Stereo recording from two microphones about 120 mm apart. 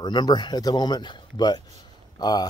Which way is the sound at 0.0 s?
35° left (ahead or behind).